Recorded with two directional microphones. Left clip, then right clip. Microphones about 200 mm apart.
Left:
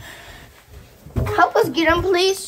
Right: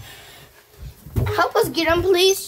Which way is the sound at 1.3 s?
5° left (ahead or behind).